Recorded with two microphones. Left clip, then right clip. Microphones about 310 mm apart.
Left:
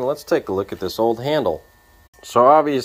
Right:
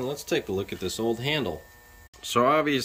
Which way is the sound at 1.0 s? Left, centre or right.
Centre.